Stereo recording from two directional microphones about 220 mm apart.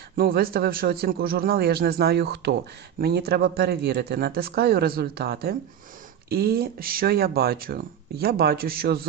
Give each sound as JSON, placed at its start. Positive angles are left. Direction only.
{"t": 0.2, "sound": "speech", "side_deg": -40}